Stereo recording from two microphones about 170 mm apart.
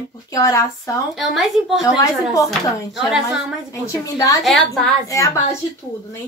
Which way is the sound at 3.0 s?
Centre (ahead or behind).